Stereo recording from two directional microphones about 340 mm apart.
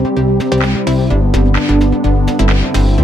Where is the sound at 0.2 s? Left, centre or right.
Centre.